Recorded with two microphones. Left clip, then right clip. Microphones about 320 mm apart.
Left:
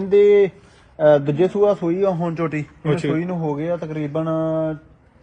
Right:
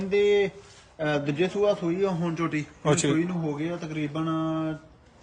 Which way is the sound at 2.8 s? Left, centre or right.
Centre.